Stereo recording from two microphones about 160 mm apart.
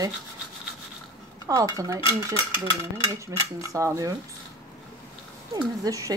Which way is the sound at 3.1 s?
20° right (ahead or behind).